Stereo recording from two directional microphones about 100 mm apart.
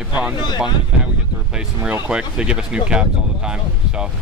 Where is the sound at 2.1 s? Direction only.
10° right (ahead or behind).